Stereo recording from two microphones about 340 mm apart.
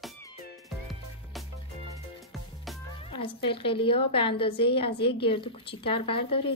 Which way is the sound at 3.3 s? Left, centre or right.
Centre.